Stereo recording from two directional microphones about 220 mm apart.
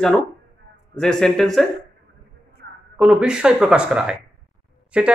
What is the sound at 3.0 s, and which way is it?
Speech, 5° right (ahead or behind).